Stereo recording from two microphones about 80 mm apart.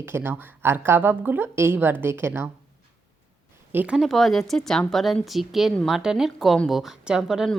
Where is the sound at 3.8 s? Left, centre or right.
Centre.